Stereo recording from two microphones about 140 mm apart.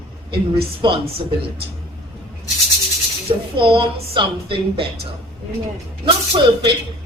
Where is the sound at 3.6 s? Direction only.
40° right (ahead or behind).